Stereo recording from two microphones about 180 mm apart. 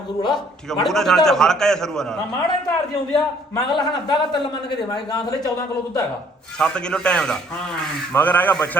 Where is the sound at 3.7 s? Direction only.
25° left (ahead or behind).